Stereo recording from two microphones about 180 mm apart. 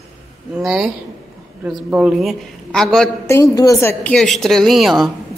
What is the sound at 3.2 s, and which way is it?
Speech, 15° left (ahead or behind).